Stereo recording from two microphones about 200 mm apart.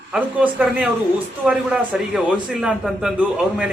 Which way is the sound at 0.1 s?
5° right (ahead or behind).